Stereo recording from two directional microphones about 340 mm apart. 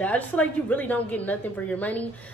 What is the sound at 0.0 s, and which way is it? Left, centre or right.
A woman's voice, centre.